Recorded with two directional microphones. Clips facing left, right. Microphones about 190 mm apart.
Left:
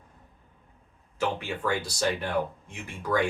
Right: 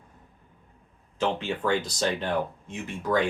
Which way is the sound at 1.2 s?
20° right (ahead or behind).